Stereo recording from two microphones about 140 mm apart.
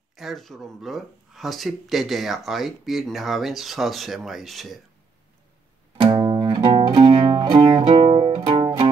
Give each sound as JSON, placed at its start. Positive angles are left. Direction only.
{"t": 0.1, "sound": "speech", "side_deg": 0}
{"t": 5.9, "sound": "music", "side_deg": -30}